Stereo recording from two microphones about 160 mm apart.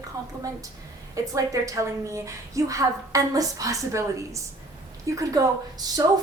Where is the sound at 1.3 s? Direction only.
20° right (ahead or behind).